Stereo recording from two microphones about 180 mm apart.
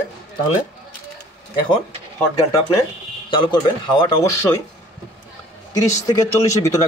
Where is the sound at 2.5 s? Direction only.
20° left (ahead or behind).